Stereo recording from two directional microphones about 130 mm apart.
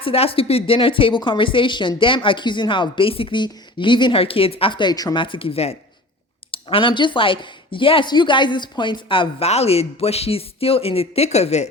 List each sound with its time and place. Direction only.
0.0 s a woman's voice: 45° left (ahead or behind)
9.5 s speech: 55° left (ahead or behind)